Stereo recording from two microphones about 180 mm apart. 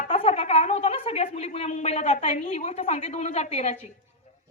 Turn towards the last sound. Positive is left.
turn(degrees=35)  # may be behind; listen again after turning